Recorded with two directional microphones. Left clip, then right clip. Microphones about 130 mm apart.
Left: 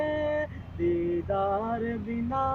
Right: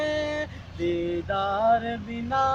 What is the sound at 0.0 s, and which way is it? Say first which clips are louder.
Music: right 1 dB; 35° right (ahead or behind).